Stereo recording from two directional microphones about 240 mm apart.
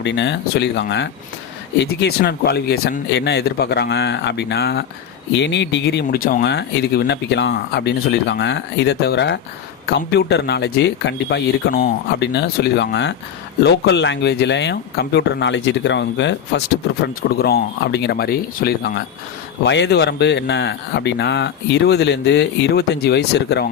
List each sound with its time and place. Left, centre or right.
0.0 s speech: left